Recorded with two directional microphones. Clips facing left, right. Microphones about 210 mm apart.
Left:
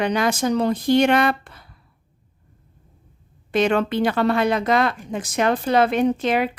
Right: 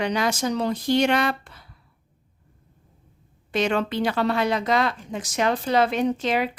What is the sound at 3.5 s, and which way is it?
Speech, 55° left (ahead or behind).